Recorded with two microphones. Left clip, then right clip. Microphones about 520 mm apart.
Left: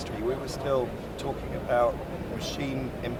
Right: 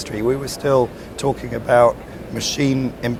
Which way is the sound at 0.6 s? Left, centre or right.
Right.